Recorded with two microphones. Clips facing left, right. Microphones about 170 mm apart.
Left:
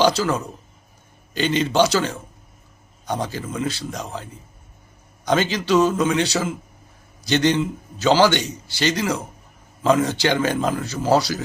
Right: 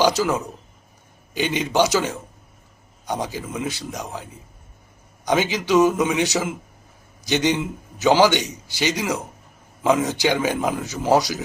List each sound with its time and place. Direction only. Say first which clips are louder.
0.2 s a man's voice: right 1 dB; 20° right (ahead or behind)
3.1 s a man's voice: left 1 dB; 15° right (ahead or behind)
3.7 s a man's voice: left 1 dB; 15° right (ahead or behind)
5.2 s a man's voice: left 1 dB; 15° right (ahead or behind)